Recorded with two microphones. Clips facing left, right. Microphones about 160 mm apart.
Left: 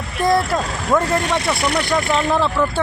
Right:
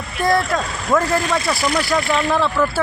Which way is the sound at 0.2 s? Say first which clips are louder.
Left 1 dB; centre (ahead or behind).